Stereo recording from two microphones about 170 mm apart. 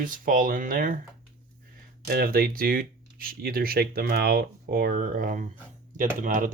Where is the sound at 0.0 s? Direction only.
55° right (ahead or behind).